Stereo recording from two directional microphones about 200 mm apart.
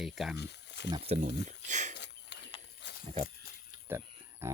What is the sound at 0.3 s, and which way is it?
Speech, 60° left (ahead or behind).